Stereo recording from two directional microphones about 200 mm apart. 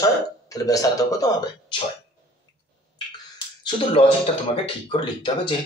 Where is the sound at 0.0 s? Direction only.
15° left (ahead or behind).